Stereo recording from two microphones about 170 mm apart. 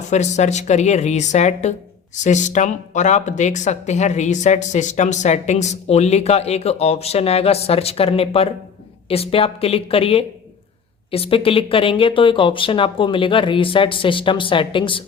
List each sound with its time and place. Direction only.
0.1 s speech: 45° left (ahead or behind)